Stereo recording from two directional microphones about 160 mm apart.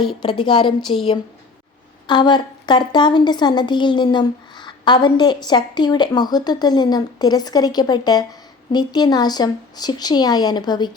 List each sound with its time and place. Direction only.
0.2 s a woman's voice: 30° left (ahead or behind)
2.0 s a woman's voice: 30° left (ahead or behind)